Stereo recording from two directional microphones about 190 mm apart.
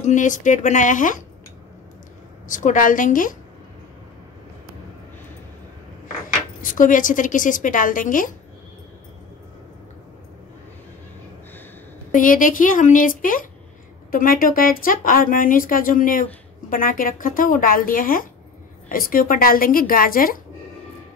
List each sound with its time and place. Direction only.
0.0 s speech: 40° left (ahead or behind)
2.4 s speech: 45° left (ahead or behind)
6.6 s speech: 45° left (ahead or behind)
12.1 s speech: 45° left (ahead or behind)